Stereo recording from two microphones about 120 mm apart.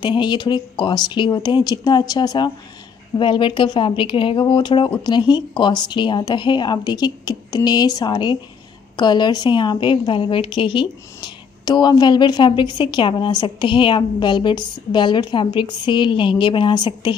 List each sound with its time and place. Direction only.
0.0 s a woman's voice: 40° left (ahead or behind)